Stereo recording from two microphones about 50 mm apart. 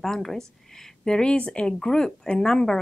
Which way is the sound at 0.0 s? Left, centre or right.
Centre.